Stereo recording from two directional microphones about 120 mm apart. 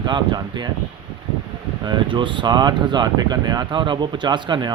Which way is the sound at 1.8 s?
40° right (ahead or behind).